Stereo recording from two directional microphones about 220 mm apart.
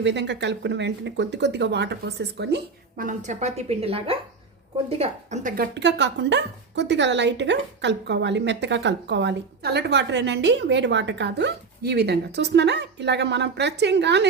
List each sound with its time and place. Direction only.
0.0 s a woman's voice: 55° right (ahead or behind)
3.0 s a woman's voice: 35° right (ahead or behind)
5.7 s a woman's voice: 55° right (ahead or behind)